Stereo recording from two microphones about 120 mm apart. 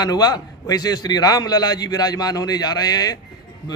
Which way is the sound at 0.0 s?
35° left (ahead or behind).